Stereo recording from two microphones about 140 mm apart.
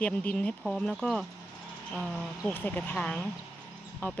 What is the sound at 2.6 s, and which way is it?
Speech, 10° left (ahead or behind).